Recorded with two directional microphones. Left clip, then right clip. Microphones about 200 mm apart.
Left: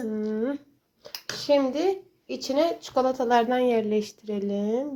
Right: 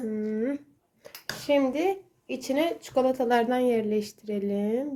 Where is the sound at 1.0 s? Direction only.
Centre (ahead or behind).